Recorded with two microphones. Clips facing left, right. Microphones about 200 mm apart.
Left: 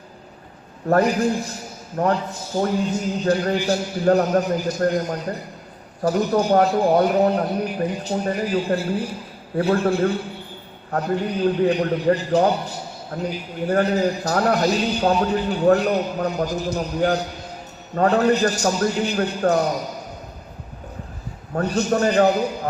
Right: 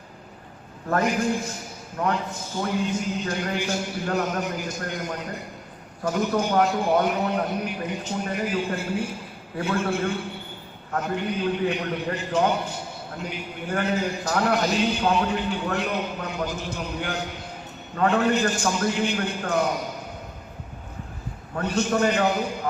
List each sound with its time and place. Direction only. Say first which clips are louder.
0.9 s a man's voice: left 5 dB; 35° left (ahead or behind)
21.5 s a man's voice: left 3 dB; 40° left (ahead or behind)